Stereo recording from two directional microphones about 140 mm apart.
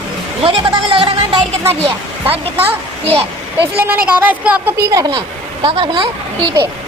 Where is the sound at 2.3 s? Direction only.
15° right (ahead or behind).